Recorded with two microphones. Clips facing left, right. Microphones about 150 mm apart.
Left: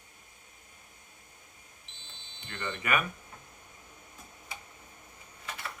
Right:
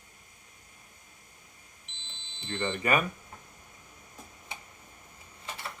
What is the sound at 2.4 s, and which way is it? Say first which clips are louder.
Smoke detector: right 5 dB; 25° right (ahead or behind).